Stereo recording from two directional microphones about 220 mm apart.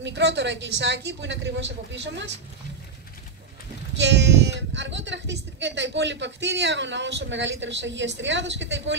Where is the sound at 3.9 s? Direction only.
50° right (ahead or behind).